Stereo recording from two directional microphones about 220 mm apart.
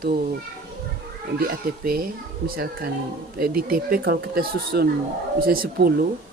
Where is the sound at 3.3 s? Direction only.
40° right (ahead or behind).